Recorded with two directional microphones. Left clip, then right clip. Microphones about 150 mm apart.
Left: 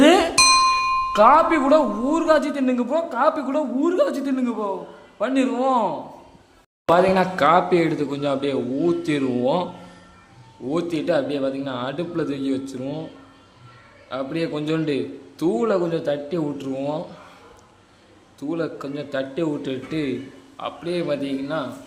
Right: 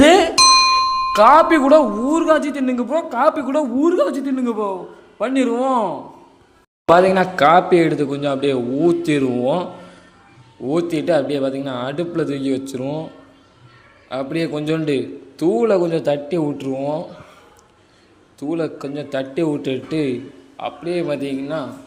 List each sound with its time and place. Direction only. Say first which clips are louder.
0.0 s music: right 4 dB; 15° right (ahead or behind)
1.1 s a man's voice: right 4 dB; 25° right (ahead or behind)
4.4 s a man's voice: right 4 dB; 25° right (ahead or behind)
6.8 s a man's voice: right 4 dB; 25° right (ahead or behind)
9.3 s a man's voice: right 2 dB; 5° right (ahead or behind)
10.7 s a man's voice: right 4 dB; 20° right (ahead or behind)
14.1 s a man's voice: right 3 dB; 25° right (ahead or behind)
16.7 s speech: right 4 dB; 5° right (ahead or behind)
18.3 s a man's voice: right 4 dB; 20° right (ahead or behind)
20.6 s a man's voice: right 3 dB; 10° right (ahead or behind)